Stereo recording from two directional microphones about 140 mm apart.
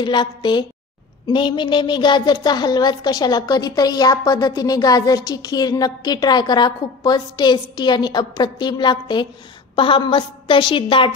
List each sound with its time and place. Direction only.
0.0 s a woman's voice: 35° left (ahead or behind)